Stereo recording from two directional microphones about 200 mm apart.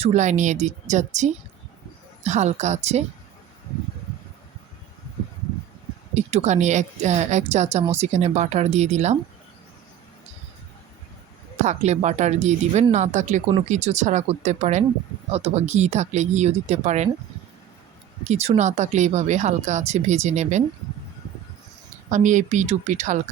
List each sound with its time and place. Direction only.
0.0 s speech: 35° right (ahead or behind)
6.1 s speech: 35° right (ahead or behind)
11.6 s speech: 35° right (ahead or behind)
18.3 s speech: 35° right (ahead or behind)
22.1 s speech: 40° right (ahead or behind)